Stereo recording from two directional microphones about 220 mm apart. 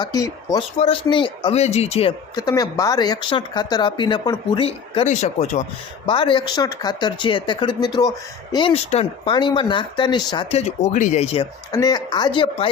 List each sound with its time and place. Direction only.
0.0 s speech: 15° left (ahead or behind)
11.7 s speech: 15° left (ahead or behind)